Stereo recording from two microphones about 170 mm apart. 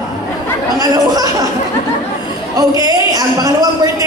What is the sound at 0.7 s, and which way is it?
Speech, 20° right (ahead or behind).